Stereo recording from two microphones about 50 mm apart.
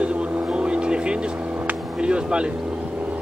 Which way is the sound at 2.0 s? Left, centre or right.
Centre.